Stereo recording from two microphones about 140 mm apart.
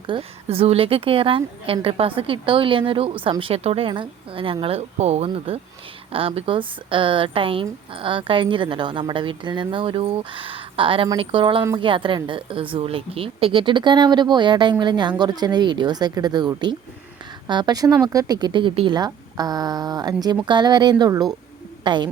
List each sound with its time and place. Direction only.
0.1 s a woman's voice: 45° right (ahead or behind)